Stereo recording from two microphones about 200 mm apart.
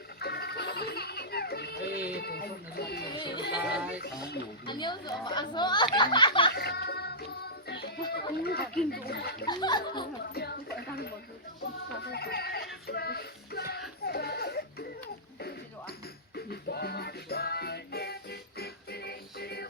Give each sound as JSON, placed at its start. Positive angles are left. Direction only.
{"t": 0.2, "sound": "music", "side_deg": 55}
{"t": 2.1, "sound": "a sound", "side_deg": 50}
{"t": 3.2, "sound": "music", "side_deg": 25}
{"t": 3.6, "sound": "music", "side_deg": -5}
{"t": 4.6, "sound": "speech", "side_deg": 20}
{"t": 6.5, "sound": "music", "side_deg": 50}
{"t": 8.4, "sound": "speech", "side_deg": 55}
{"t": 9.5, "sound": "speech", "side_deg": 20}
{"t": 10.3, "sound": "a sound", "side_deg": 50}
{"t": 12.0, "sound": "music", "side_deg": 55}
{"t": 12.9, "sound": "child singing", "side_deg": 50}
{"t": 14.1, "sound": "music", "side_deg": 50}